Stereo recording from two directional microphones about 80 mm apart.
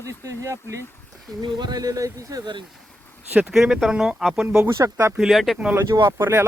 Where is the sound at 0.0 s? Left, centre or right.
Right.